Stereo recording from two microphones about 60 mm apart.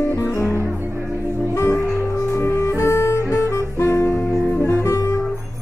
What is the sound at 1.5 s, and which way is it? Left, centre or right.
Music, left.